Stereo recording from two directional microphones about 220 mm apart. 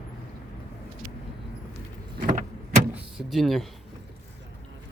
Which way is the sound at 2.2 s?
40° right (ahead or behind).